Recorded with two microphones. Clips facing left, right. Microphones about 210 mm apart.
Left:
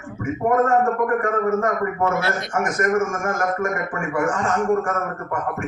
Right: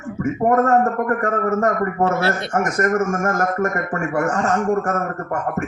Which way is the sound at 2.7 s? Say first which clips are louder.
Right 1 dB; 45° right (ahead or behind).